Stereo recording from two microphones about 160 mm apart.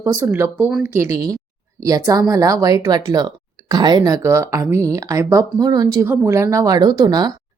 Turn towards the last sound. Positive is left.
turn(degrees=-25)  # may be behind; listen again after turning